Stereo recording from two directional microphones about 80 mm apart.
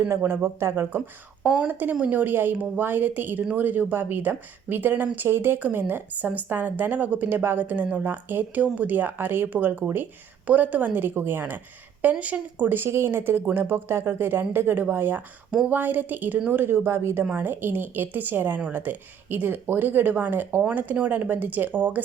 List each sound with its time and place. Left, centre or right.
0.1 s speech: right
1.5 s speech: centre